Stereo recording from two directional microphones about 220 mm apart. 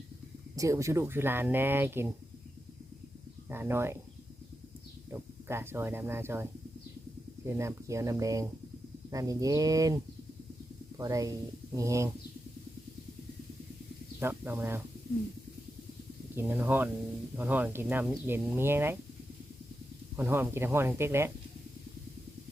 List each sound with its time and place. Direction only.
0.5 s speech: 15° right (ahead or behind)
3.5 s speech: 10° right (ahead or behind)
5.1 s speech: 10° right (ahead or behind)
14.2 s speech: 10° right (ahead or behind)
16.3 s speech: 10° right (ahead or behind)
20.1 s speech: 10° right (ahead or behind)